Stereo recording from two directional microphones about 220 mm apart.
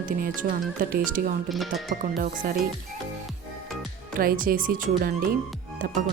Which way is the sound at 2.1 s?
40° right (ahead or behind).